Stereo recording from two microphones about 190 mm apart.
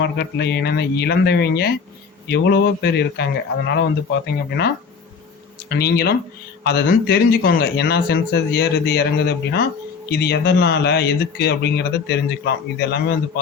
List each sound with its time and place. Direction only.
0.0 s speech: 60° left (ahead or behind)